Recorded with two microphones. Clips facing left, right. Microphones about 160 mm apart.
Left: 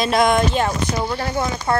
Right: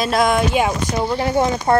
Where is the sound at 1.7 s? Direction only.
30° right (ahead or behind).